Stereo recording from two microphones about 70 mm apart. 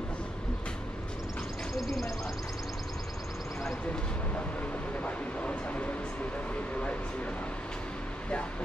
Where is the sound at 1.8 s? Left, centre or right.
Centre.